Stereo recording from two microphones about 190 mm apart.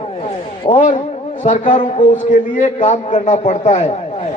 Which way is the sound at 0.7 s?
40° left (ahead or behind).